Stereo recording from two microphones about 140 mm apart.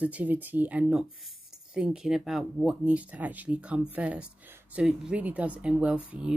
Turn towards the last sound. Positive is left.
turn(degrees=-10)  # may be behind; listen again after turning